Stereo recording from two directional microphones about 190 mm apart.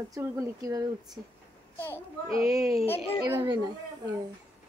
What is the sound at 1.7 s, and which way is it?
Speech, 10° left (ahead or behind).